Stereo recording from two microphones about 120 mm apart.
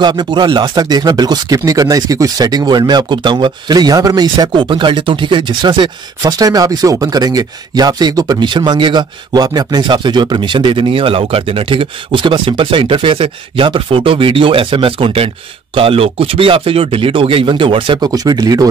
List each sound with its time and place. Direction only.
0.0 s speech: 35° right (ahead or behind)